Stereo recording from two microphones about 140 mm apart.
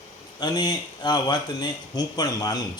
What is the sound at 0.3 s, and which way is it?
Speech, 30° left (ahead or behind).